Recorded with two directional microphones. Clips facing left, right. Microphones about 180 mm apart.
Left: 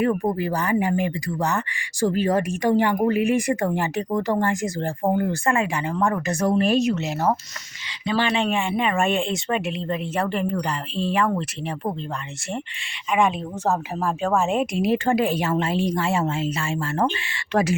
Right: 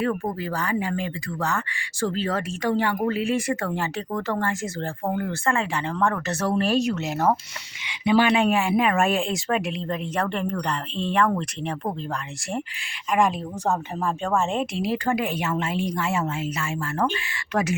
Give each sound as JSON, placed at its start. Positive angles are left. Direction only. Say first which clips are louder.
{"t": 0.3, "sound": "speech", "louder": "left 4 dB", "side_deg": 15}
{"t": 8.0, "sound": "speech", "louder": "right 3 dB", "side_deg": -10}
{"t": 13.1, "sound": "a woman's voice", "louder": "left 1 dB", "side_deg": 0}